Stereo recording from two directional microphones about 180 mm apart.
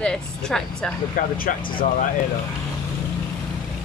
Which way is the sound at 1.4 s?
50° left (ahead or behind).